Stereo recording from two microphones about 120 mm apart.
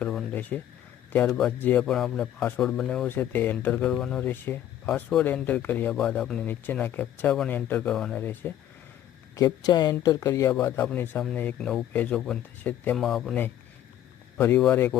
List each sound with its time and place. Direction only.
0.0 s a sound: centre (ahead or behind)
0.5 s speech: 10° left (ahead or behind)
4.2 s speech: 15° left (ahead or behind)
9.3 s speech: 35° left (ahead or behind); by 13.0 s 10° left (ahead or behind)
13.0 s speech: centre (ahead or behind)
14.3 s speech: 15° left (ahead or behind)